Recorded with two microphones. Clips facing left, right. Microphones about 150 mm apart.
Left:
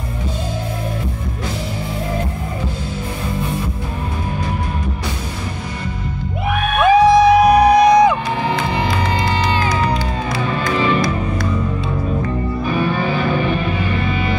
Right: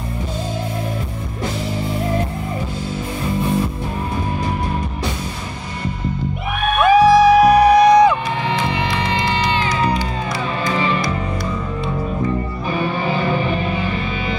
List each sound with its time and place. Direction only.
6.8 s music: 20° left (ahead or behind)
8.5 s music: 40° left (ahead or behind)